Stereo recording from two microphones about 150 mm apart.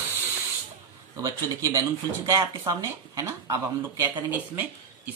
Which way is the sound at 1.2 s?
20° right (ahead or behind).